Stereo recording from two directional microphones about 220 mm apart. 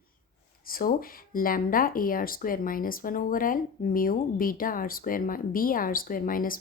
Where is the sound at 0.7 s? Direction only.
40° left (ahead or behind).